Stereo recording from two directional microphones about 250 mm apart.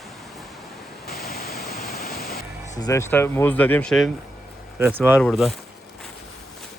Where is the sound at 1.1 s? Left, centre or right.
Left.